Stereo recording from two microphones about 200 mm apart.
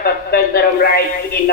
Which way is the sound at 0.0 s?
50° left (ahead or behind).